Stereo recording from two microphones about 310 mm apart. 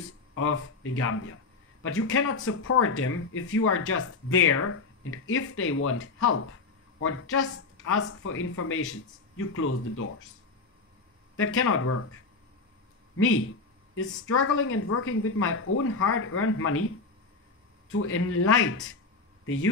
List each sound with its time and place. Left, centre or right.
0.3 s speech: left
11.3 s speech: left
14.3 s speech: left
17.9 s speech: left